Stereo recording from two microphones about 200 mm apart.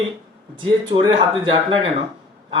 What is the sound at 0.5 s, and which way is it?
Speech, 20° right (ahead or behind).